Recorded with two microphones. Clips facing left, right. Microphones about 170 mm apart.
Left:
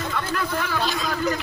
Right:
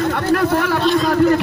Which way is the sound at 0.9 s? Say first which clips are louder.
Right 11 dB; 50° right (ahead or behind).